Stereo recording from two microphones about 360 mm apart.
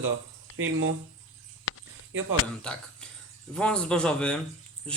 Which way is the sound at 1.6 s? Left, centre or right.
Left.